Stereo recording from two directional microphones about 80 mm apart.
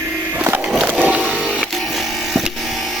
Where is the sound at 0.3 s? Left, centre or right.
Right.